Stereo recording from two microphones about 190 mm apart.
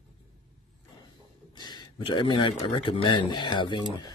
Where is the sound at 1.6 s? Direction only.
25° left (ahead or behind).